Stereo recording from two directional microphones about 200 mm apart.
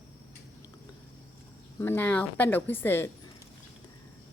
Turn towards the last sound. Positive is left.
turn(degrees=10)  # may be behind; listen again after turning